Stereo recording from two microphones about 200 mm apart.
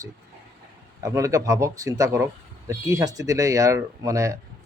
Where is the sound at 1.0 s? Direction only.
15° right (ahead or behind).